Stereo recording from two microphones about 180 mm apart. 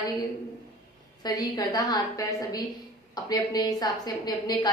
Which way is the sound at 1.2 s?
20° left (ahead or behind).